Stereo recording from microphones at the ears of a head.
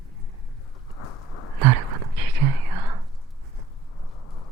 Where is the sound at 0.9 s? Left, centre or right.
Left.